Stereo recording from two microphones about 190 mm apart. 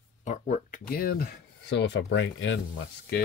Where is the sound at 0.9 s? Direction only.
50° left (ahead or behind); by 2.6 s 75° left (ahead or behind).